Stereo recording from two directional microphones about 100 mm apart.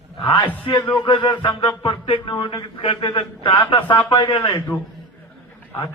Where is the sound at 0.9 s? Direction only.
50° left (ahead or behind).